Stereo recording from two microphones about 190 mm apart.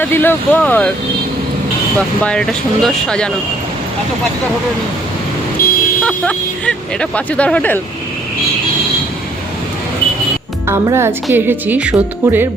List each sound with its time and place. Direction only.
0.0 s speech: 10° left (ahead or behind)
2.0 s speech: 5° left (ahead or behind)
5.6 s vehicle: 50° left (ahead or behind)
6.0 s speech: 5° left (ahead or behind)
10.7 s a woman's voice: 15° right (ahead or behind)